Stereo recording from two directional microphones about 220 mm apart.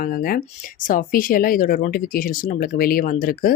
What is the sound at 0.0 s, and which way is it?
Speech, 40° left (ahead or behind).